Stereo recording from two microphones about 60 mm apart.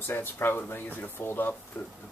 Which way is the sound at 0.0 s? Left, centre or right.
Left.